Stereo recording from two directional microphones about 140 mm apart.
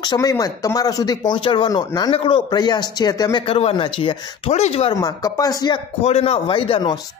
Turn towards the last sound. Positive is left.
turn(degrees=35)  # may be behind; listen again after turning